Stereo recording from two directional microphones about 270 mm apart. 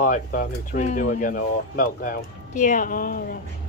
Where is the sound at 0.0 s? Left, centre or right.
Left.